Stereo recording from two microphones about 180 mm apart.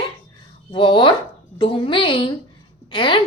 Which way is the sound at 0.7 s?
25° left (ahead or behind).